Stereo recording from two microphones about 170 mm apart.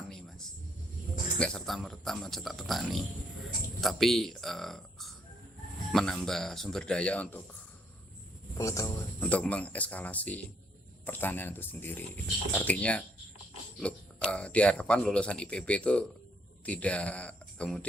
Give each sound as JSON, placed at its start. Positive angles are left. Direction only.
{"t": 0.1, "sound": "music", "side_deg": 5}
{"t": 1.4, "sound": "speech", "side_deg": 5}
{"t": 8.5, "sound": "speech", "side_deg": 20}
{"t": 9.2, "sound": "speech", "side_deg": 5}